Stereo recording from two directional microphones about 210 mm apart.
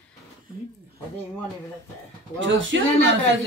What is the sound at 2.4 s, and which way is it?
Speech, 60° right (ahead or behind).